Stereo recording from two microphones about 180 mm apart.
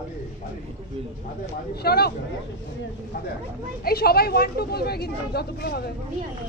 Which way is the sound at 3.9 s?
60° left (ahead or behind).